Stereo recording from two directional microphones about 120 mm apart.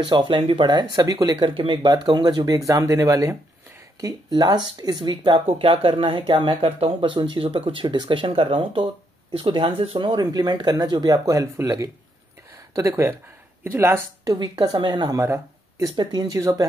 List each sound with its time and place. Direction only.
0.0 s speech: 40° right (ahead or behind)
1.5 s speech: 50° right (ahead or behind); by 14.3 s 20° right (ahead or behind)
14.3 s speech: 35° right (ahead or behind)
15.1 s speech: 25° right (ahead or behind)